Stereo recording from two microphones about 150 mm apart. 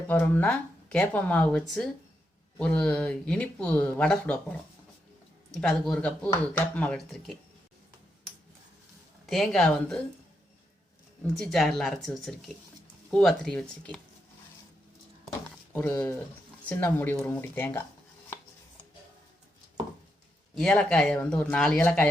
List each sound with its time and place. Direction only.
0.1 s speech: 15° left (ahead or behind)
5.5 s speech: 5° left (ahead or behind)
9.2 s speech: centre (ahead or behind)
11.3 s speech: centre (ahead or behind)
15.7 s speech: 15° left (ahead or behind)
20.6 s speech: 5° left (ahead or behind)